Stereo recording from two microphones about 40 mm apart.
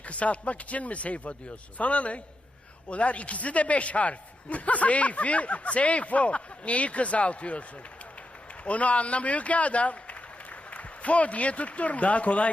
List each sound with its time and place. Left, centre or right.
0.0 s a man's voice: left
8.6 s a man's voice: left